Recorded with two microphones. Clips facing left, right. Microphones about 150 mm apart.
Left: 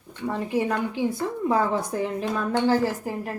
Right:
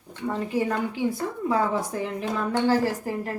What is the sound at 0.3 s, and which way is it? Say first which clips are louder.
A woman's voice: left 1 dB; 20° left (ahead or behind).